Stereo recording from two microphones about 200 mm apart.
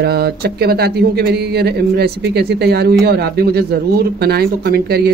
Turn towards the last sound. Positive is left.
turn(degrees=-50)  # may be behind; listen again after turning